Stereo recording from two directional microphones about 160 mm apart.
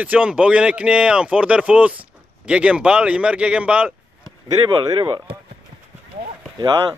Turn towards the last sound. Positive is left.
turn(degrees=-25)  # may be behind; listen again after turning